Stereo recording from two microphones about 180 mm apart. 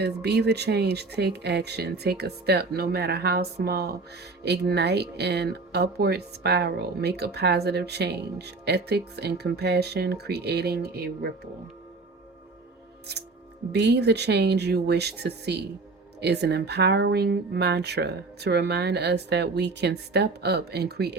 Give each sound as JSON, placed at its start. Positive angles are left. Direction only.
{"t": 0.0, "sound": "speech", "side_deg": -65}
{"t": 13.7, "sound": "speech", "side_deg": -65}